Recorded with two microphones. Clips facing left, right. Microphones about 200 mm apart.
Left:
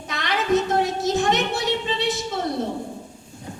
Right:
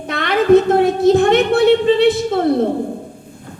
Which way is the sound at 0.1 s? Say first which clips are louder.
Right 10 dB; 55° right (ahead or behind).